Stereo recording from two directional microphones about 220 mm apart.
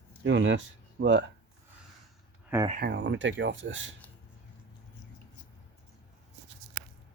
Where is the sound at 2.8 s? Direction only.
50° right (ahead or behind).